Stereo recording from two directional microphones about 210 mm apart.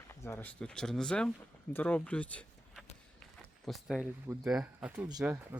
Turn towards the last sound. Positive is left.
turn(degrees=-5)  # may be behind; listen again after turning